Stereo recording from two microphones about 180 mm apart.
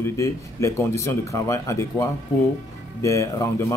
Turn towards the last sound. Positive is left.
turn(degrees=15)  # may be behind; listen again after turning